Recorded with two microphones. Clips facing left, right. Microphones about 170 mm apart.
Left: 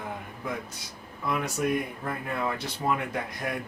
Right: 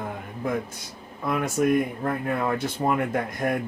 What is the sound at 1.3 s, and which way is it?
Speech, 50° right (ahead or behind).